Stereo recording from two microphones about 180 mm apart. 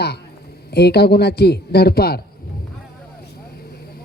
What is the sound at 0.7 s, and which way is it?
A man's voice, 65° left (ahead or behind).